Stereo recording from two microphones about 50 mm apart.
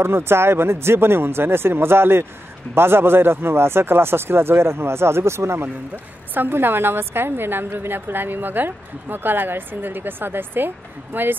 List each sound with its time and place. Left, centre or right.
0.0 s a woman's voice: right
6.3 s a woman's voice: right